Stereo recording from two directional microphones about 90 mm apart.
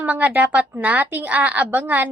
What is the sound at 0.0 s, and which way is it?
A woman's voice, 20° right (ahead or behind).